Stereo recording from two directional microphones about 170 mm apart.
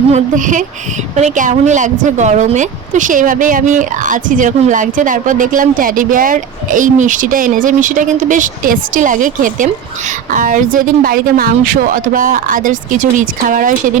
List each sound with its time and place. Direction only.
0.1 s a woman's voice: 50° right (ahead or behind)